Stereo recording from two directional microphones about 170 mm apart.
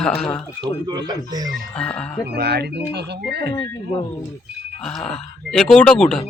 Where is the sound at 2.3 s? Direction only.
70° right (ahead or behind).